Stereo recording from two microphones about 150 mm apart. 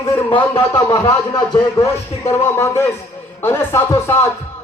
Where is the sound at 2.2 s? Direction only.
20° left (ahead or behind).